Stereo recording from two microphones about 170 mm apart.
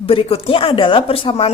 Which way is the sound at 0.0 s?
35° left (ahead or behind).